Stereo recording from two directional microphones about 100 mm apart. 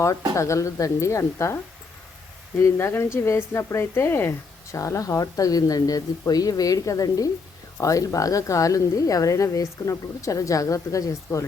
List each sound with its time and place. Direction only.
0.3 s a woman's voice: 30° left (ahead or behind)
2.6 s speech: 30° left (ahead or behind)